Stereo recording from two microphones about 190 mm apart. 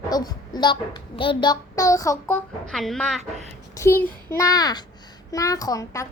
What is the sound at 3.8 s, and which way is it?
A child's voice, 15° left (ahead or behind).